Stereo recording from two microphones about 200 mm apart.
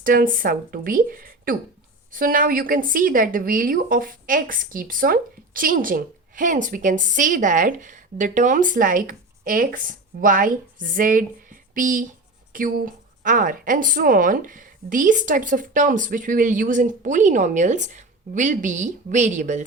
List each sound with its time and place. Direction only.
0.0 s a woman's voice: 45° right (ahead or behind)